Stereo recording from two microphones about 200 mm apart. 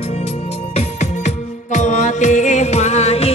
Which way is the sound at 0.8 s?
35° left (ahead or behind).